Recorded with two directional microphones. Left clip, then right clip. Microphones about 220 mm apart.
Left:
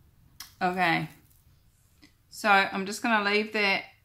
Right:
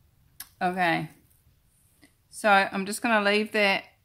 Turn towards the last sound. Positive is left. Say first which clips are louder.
# right 2 dB
turn(degrees=-40)  # may be behind; listen again after turning